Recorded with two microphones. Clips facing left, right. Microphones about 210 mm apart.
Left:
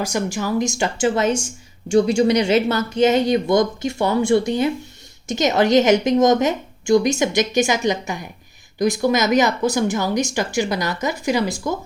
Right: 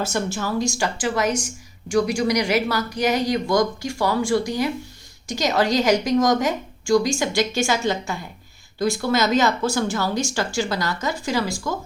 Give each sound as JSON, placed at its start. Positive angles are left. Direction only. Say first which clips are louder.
{"t": 0.0, "sound": "speech", "louder": "left 2 dB", "side_deg": 15}